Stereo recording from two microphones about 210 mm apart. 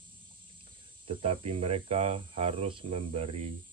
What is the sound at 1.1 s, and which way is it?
Speech, 25° right (ahead or behind).